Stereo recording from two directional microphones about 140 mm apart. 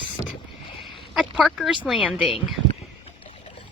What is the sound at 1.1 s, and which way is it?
Speech, centre (ahead or behind).